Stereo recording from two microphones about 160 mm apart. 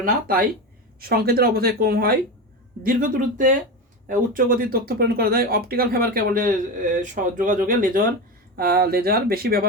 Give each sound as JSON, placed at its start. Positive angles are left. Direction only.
{"t": 0.0, "sound": "speech", "side_deg": -65}
{"t": 2.8, "sound": "speech", "side_deg": -60}
{"t": 8.5, "sound": "speech", "side_deg": -70}